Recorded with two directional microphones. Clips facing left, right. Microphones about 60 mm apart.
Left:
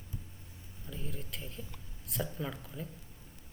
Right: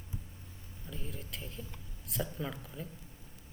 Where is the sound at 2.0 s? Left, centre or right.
Centre.